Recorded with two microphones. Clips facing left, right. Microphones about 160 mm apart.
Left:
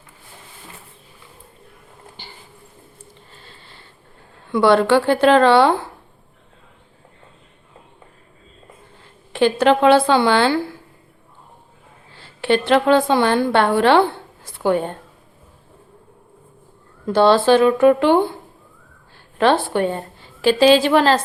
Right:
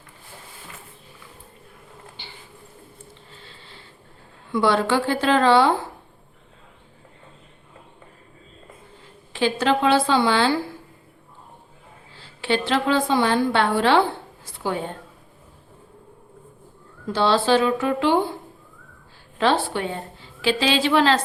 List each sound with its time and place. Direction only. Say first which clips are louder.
4.5 s a woman's voice: left 6 dB; 60° left (ahead or behind)
9.3 s a woman's voice: left 6 dB; 60° left (ahead or behind)
12.4 s a woman's voice: left 6 dB; 55° left (ahead or behind)
17.1 s a woman's voice: left 6 dB; 55° left (ahead or behind)
19.4 s a woman's voice: left 5 dB; 55° left (ahead or behind)